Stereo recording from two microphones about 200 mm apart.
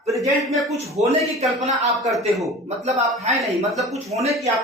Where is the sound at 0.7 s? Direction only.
30° right (ahead or behind).